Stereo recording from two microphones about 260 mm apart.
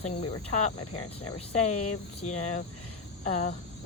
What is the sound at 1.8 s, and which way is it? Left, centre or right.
Speech, left.